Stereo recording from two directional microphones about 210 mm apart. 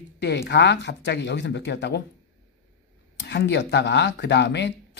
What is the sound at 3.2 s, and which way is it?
Speech, 55° left (ahead or behind).